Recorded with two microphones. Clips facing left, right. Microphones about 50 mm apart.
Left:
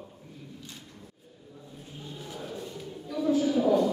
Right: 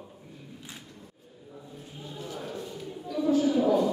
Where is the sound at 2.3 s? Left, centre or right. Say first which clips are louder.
Even; centre.